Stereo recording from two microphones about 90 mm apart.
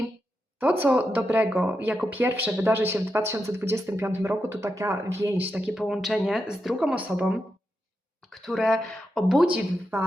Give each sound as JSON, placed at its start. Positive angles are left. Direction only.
{"t": 0.6, "sound": "speech", "side_deg": -20}
{"t": 5.4, "sound": "speech", "side_deg": -20}
{"t": 5.7, "sound": "speech", "side_deg": -5}
{"t": 6.7, "sound": "speech", "side_deg": -15}
{"t": 9.5, "sound": "speech", "side_deg": -20}